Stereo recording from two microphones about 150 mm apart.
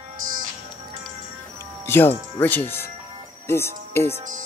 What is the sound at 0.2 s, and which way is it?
Music, 60° right (ahead or behind).